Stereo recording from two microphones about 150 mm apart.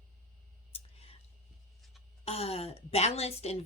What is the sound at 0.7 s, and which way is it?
Whispering, 40° left (ahead or behind).